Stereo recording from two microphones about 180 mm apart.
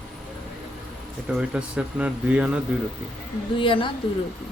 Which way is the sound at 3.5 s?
30° left (ahead or behind).